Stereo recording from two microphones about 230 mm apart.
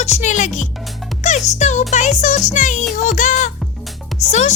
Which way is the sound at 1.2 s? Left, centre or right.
Left.